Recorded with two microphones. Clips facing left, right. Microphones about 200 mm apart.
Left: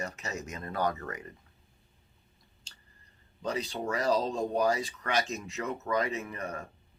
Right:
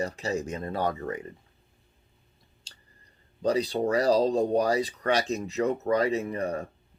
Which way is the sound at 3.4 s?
35° right (ahead or behind).